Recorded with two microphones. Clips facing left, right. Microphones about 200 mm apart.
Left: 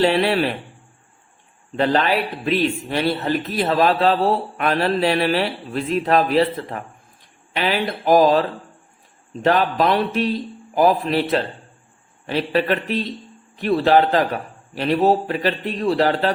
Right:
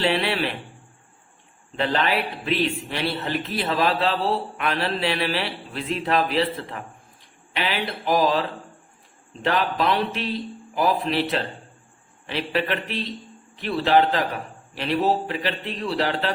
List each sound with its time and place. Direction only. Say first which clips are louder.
0.0 s a man's voice: left 6 dB; 45° left (ahead or behind)
1.7 s a man's voice: left 5 dB; 45° left (ahead or behind)